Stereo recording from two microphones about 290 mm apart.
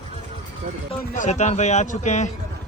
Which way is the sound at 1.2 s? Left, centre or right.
Left.